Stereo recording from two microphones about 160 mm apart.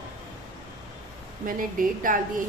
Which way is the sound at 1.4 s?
60° right (ahead or behind).